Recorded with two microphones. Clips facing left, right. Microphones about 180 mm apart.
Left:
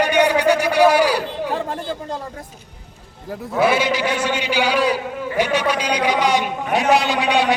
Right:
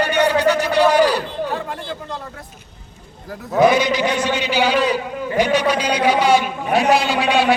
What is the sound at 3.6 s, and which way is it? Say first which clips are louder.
A man's voice: right 3 dB; 10° left (ahead or behind).